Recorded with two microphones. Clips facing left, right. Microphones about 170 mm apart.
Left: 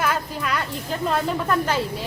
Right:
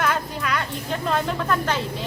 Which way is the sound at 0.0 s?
5° left (ahead or behind).